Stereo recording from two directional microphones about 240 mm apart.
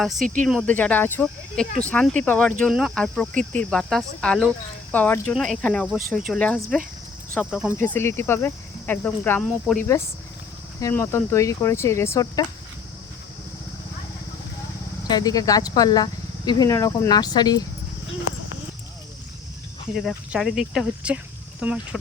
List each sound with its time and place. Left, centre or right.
0.4 s speech: centre
7.8 s speech: centre
10.8 s speech: centre
15.0 s speech: centre
20.0 s speech: centre